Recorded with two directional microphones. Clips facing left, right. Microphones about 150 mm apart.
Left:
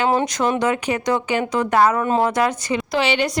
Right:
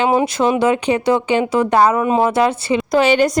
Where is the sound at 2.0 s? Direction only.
15° right (ahead or behind).